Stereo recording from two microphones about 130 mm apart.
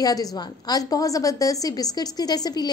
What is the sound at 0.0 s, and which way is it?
A woman's voice, 30° left (ahead or behind).